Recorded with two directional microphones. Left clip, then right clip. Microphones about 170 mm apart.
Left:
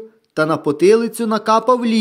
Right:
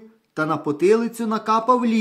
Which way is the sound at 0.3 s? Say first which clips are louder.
Left 6 dB; 35° left (ahead or behind).